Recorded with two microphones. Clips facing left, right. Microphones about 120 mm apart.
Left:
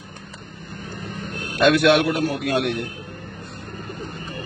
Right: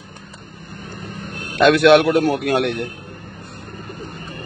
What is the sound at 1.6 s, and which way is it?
Speech, 60° right (ahead or behind).